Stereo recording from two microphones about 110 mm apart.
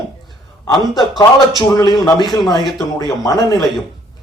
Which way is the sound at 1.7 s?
40° left (ahead or behind).